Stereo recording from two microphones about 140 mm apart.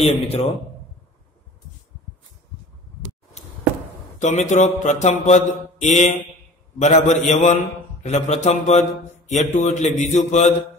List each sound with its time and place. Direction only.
0.0 s a man's voice: 40° left (ahead or behind)
4.2 s mantra: 60° left (ahead or behind)
6.8 s a man's voice: 55° left (ahead or behind)
8.0 s mantra: 55° left (ahead or behind)